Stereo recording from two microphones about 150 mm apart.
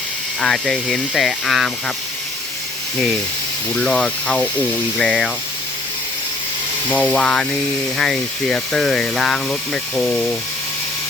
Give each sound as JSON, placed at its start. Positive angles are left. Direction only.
{"t": 0.4, "sound": "speech", "side_deg": 5}
{"t": 3.8, "sound": "speech", "side_deg": 5}
{"t": 6.9, "sound": "speech", "side_deg": 10}